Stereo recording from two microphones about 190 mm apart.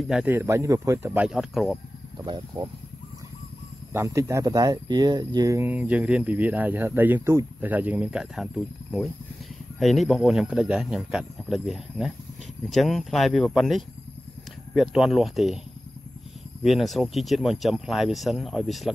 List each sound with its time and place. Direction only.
0.0 s speech: 5° right (ahead or behind)
2.1 s speech: 25° right (ahead or behind)
3.9 s speech: 15° right (ahead or behind)
16.6 s speech: centre (ahead or behind)